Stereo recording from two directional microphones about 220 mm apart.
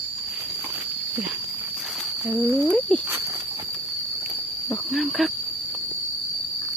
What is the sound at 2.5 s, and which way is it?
Speech, 15° right (ahead or behind).